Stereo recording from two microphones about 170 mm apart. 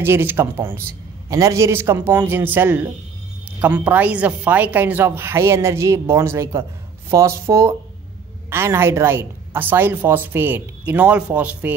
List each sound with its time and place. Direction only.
0.0 s a woman's voice: 15° right (ahead or behind)